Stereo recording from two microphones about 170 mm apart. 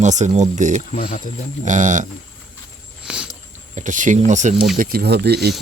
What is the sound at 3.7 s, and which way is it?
Speech, 50° right (ahead or behind).